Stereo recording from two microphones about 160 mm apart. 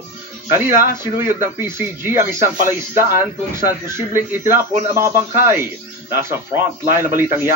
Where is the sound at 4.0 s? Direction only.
15° right (ahead or behind).